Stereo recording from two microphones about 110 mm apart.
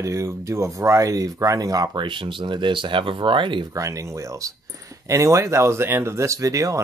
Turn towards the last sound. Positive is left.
turn(degrees=-30)  # may be behind; listen again after turning